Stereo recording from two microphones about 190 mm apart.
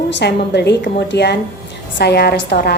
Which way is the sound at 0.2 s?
60° left (ahead or behind).